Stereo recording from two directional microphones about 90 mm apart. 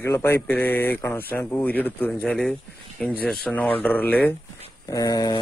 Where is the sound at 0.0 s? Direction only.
25° left (ahead or behind).